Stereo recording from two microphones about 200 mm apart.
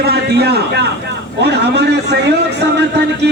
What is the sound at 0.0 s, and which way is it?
A man's voice, 55° right (ahead or behind).